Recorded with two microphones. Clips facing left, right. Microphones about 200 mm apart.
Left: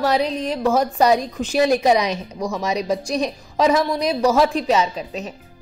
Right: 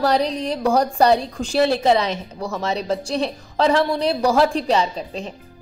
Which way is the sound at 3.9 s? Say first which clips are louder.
Right 1 dB; 30° right (ahead or behind).